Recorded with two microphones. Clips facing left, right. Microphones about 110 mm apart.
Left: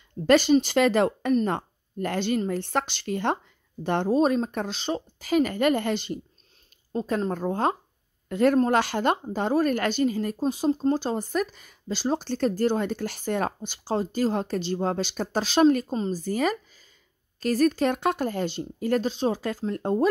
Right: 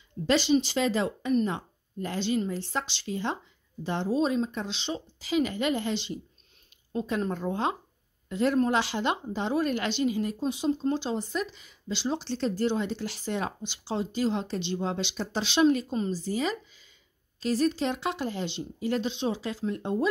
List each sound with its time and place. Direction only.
0.3 s a woman's voice: 50° left (ahead or behind)
6.9 s a woman's voice: 35° left (ahead or behind)